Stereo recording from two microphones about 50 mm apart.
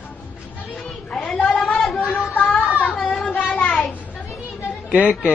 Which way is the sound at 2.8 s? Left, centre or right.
Centre.